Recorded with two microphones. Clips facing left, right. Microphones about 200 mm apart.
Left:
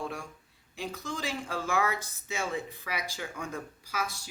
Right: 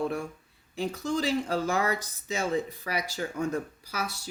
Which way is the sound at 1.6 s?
35° right (ahead or behind).